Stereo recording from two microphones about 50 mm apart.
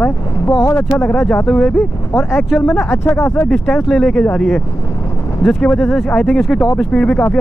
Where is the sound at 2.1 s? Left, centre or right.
Left.